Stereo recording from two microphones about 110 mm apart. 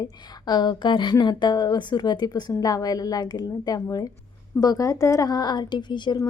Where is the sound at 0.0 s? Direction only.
40° left (ahead or behind).